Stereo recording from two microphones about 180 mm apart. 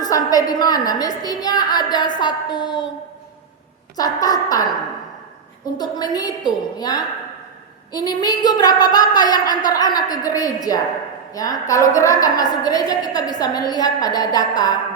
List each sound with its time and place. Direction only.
0.0 s a woman's voice: 20° left (ahead or behind)
3.9 s a woman's voice: 20° left (ahead or behind)
5.7 s a woman's voice: 20° left (ahead or behind)